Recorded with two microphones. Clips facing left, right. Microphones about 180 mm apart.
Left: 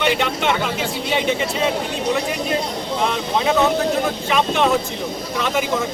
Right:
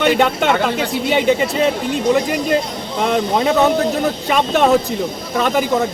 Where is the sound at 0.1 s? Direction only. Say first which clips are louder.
Right 5 dB; 45° right (ahead or behind).